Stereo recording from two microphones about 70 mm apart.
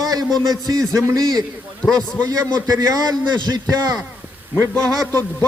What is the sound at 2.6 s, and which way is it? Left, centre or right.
Speech, right.